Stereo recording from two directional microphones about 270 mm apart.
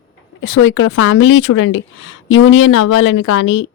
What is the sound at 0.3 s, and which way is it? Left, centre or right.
Speech, left.